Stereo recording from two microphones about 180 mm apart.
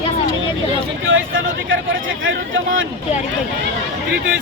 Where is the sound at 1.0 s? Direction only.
90° right.